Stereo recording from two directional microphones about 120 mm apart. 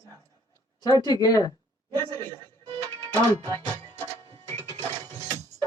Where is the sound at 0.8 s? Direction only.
30° left (ahead or behind).